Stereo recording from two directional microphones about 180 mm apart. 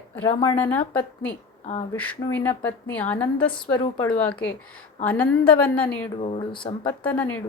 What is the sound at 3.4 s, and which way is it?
Speech, 25° left (ahead or behind).